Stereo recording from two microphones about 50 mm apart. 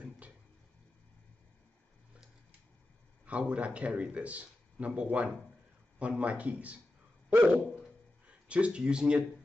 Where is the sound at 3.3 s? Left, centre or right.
Right.